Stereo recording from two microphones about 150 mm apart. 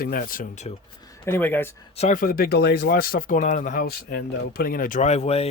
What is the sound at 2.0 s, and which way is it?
Speech, 60° left (ahead or behind).